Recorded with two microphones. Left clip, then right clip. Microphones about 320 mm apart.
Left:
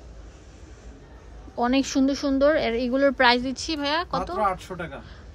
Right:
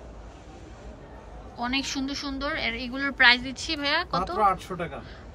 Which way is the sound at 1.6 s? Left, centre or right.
Left.